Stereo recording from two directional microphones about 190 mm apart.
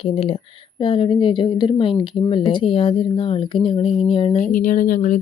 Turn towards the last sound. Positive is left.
turn(degrees=45)  # may be behind; listen again after turning